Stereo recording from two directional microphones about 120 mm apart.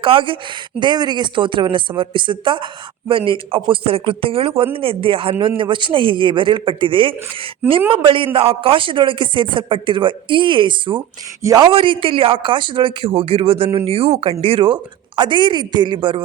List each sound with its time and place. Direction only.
0.0 s speech: 45° right (ahead or behind)
11.4 s speech: 35° right (ahead or behind)
11.7 s speech: 50° right (ahead or behind)